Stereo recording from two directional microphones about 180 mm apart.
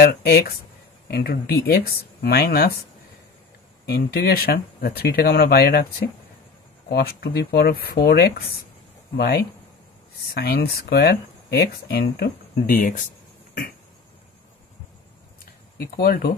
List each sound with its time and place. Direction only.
0.0 s speech: 60° left (ahead or behind)
3.8 s speech: 60° left (ahead or behind)
15.8 s speech: 60° left (ahead or behind)